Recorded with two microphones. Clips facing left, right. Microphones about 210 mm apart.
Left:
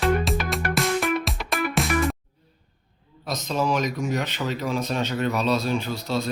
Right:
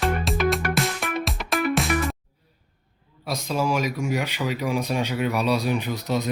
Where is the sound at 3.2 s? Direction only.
10° right (ahead or behind).